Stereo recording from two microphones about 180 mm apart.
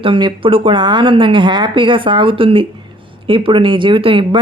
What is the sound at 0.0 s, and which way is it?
Speech, 25° right (ahead or behind).